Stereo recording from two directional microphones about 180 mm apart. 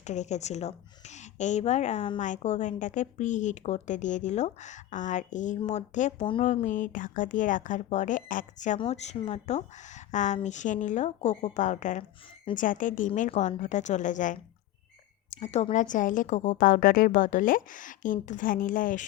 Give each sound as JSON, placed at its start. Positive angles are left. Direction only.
{"t": 0.0, "sound": "a woman's voice", "side_deg": 40}